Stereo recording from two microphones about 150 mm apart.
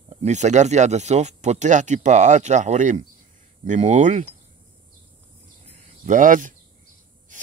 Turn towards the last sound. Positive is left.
turn(degrees=-60)  # may be behind; listen again after turning